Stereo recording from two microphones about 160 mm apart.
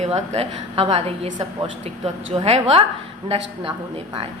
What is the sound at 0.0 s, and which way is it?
A woman's voice, 40° right (ahead or behind).